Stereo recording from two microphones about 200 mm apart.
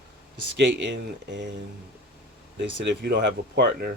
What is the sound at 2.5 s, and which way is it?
Speech, 60° right (ahead or behind).